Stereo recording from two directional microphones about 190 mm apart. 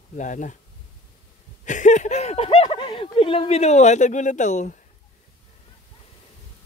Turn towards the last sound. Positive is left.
turn(degrees=40)  # may be behind; listen again after turning